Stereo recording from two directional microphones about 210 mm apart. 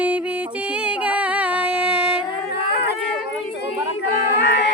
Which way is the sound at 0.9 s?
5° right (ahead or behind).